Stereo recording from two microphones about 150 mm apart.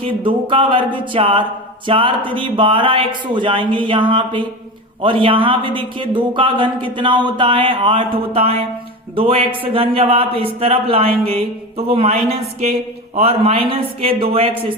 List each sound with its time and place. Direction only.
0.0 s speech: 35° right (ahead or behind)